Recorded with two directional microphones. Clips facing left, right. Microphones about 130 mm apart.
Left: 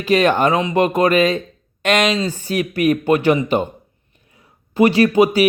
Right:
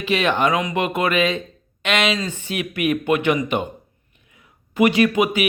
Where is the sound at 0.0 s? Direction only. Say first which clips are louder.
Left 5 dB; 40° left (ahead or behind).